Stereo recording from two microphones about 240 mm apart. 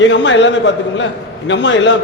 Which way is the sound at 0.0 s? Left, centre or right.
Left.